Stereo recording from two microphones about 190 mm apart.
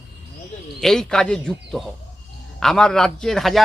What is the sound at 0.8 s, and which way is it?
A man's voice, 5° left (ahead or behind).